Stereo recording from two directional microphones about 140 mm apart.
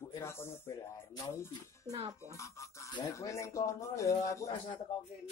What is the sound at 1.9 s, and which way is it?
Speech, 45° right (ahead or behind).